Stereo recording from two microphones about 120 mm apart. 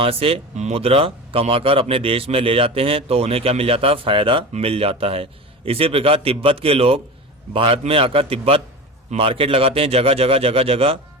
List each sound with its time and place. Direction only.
0.0 s speech: 50° right (ahead or behind)